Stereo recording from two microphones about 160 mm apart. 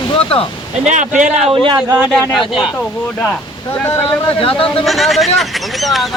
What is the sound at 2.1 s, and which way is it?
Speech, centre (ahead or behind).